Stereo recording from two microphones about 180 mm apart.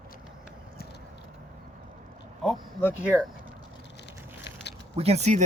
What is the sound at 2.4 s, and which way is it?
Speech, 5° left (ahead or behind).